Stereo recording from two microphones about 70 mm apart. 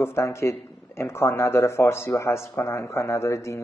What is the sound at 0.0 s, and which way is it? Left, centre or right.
A man's voice, left.